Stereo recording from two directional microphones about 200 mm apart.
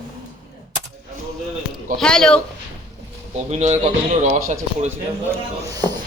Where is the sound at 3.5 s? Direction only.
35° right (ahead or behind).